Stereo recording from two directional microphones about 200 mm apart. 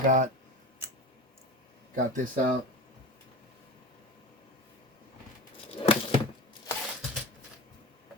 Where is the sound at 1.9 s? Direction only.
40° right (ahead or behind).